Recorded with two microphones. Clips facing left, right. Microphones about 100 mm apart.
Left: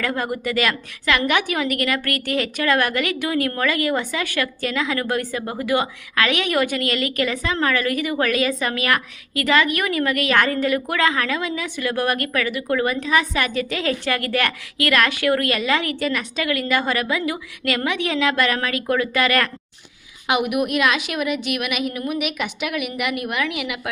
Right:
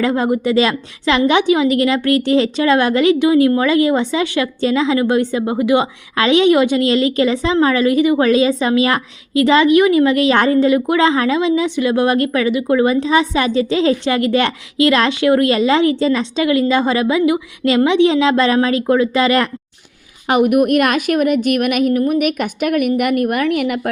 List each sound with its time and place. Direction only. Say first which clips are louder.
0.0 s a woman's voice: right 8 dB; 25° right (ahead or behind)
20.2 s a woman's voice: right 8 dB; 40° right (ahead or behind)